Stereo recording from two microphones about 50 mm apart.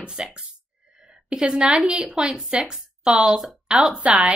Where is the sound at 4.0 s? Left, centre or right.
Right.